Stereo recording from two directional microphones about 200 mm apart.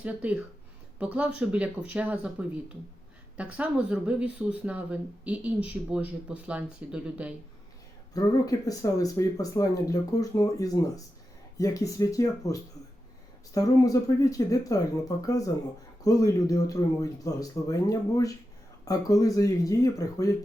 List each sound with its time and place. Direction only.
0.0 s speech: 5° right (ahead or behind)
8.1 s speech: 15° left (ahead or behind)